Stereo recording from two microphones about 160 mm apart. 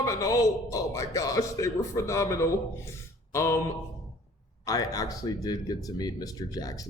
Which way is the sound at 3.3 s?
20° left (ahead or behind).